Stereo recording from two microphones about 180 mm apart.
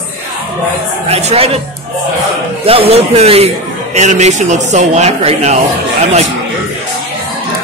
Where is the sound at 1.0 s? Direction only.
35° right (ahead or behind).